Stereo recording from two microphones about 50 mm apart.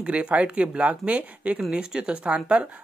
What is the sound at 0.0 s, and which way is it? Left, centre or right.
Speech, right.